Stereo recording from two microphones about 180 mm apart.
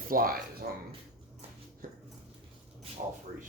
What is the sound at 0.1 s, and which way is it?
Speech, 55° right (ahead or behind).